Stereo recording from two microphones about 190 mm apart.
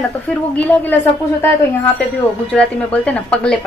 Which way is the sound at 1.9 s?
5° left (ahead or behind).